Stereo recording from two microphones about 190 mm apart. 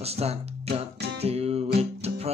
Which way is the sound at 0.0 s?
35° right (ahead or behind).